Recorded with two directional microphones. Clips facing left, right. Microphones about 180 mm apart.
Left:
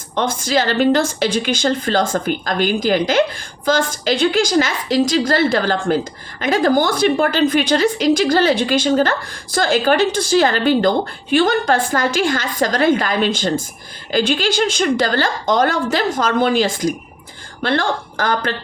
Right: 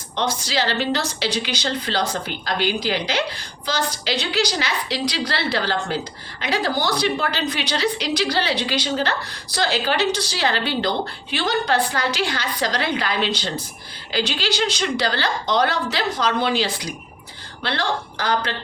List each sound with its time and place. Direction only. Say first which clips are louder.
0.2 s a woman's voice: left 5 dB; 50° left (ahead or behind)